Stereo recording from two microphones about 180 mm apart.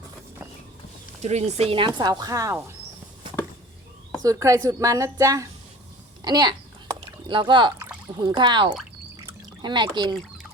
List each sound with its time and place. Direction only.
1.2 s speech: 40° right (ahead or behind); by 2.6 s 15° right (ahead or behind)
4.2 s speech: 20° right (ahead or behind)